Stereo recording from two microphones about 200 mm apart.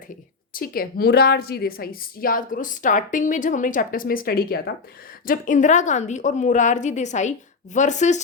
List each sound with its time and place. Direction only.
0.5 s a woman's voice: 50° left (ahead or behind)